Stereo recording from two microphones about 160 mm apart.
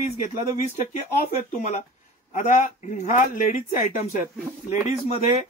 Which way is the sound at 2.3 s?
50° left (ahead or behind).